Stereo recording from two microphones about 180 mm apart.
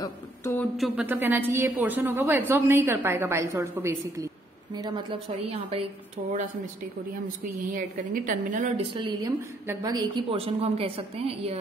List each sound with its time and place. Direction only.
0.0 s a sound: 15° left (ahead or behind)
0.6 s speech: centre (ahead or behind)
1.0 s a woman's voice: 10° right (ahead or behind)
5.5 s a woman's voice: 35° right (ahead or behind)
7.7 s a woman's voice: 45° right (ahead or behind)
8.9 s a woman's voice: 25° right (ahead or behind)